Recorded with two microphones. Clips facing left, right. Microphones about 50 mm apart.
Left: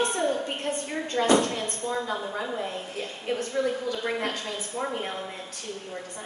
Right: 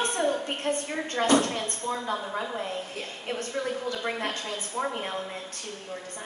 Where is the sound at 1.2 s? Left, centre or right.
Left.